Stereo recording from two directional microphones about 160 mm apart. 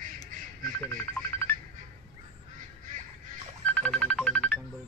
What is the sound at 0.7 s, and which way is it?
Speech, 10° left (ahead or behind).